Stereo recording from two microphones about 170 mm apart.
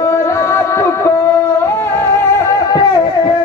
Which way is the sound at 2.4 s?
20° left (ahead or behind).